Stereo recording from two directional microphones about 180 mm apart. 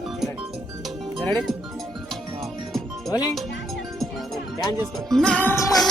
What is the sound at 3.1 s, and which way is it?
Music, 20° left (ahead or behind).